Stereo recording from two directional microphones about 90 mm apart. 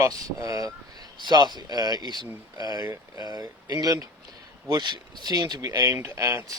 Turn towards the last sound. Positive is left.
turn(degrees=-25)  # may be behind; listen again after turning